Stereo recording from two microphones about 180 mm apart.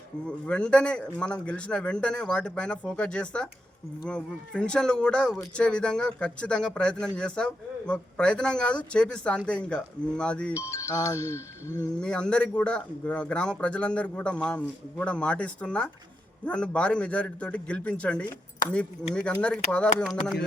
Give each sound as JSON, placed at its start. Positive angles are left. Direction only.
{"t": 0.3, "sound": "speech", "side_deg": 5}
{"t": 10.6, "sound": "a man's voice", "side_deg": 15}
{"t": 11.9, "sound": "a man's voice", "side_deg": 5}